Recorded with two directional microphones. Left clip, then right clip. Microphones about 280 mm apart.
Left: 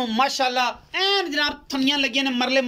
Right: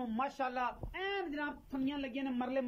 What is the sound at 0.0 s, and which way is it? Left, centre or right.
A man's voice, left.